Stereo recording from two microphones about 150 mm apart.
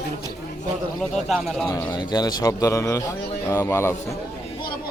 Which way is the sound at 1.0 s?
Centre (ahead or behind).